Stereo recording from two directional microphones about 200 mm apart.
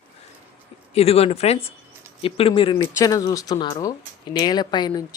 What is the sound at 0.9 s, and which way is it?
Speech, 30° left (ahead or behind).